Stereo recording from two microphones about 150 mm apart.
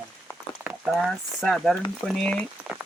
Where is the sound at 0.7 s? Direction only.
Centre (ahead or behind).